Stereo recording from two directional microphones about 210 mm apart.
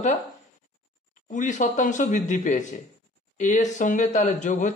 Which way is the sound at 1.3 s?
35° left (ahead or behind).